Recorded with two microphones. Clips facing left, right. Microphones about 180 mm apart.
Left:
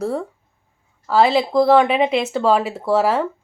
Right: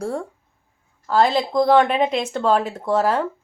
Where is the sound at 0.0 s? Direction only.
5° left (ahead or behind).